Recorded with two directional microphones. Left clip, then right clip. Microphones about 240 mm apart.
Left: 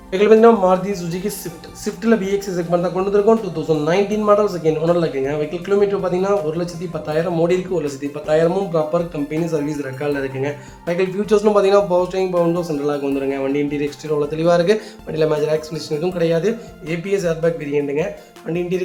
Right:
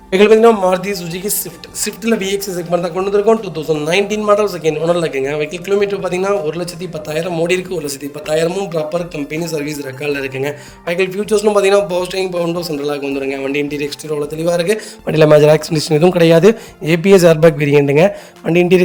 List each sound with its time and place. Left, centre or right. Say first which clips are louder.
0.1 s speech: right 3 dB; right
14.1 s speech: left 1 dB; centre
14.4 s speech: even; right